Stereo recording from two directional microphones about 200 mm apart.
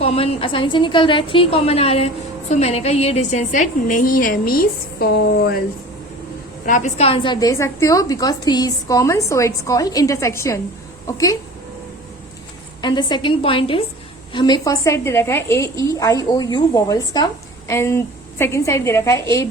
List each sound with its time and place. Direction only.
0.0 s a woman's voice: 30° left (ahead or behind); by 5.5 s 55° left (ahead or behind)
6.7 s a woman's voice: 40° left (ahead or behind); by 11.3 s 15° left (ahead or behind)
12.8 s a woman's voice: 20° left (ahead or behind)